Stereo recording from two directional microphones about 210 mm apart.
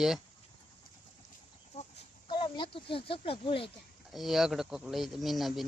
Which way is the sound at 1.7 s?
25° left (ahead or behind).